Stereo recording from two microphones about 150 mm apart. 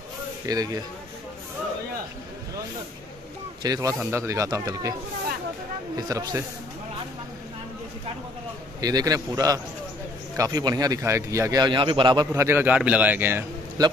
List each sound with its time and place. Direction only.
0.5 s a man's voice: 25° right (ahead or behind)
3.6 s a man's voice: 25° right (ahead or behind)
5.9 s a man's voice: 25° right (ahead or behind)
8.8 s a man's voice: 25° right (ahead or behind)
11.6 s a man's voice: 30° right (ahead or behind)
12.3 s a man's voice: 15° right (ahead or behind)
13.8 s a man's voice: 25° right (ahead or behind)